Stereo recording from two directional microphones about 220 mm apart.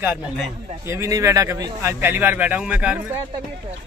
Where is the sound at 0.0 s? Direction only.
5° right (ahead or behind).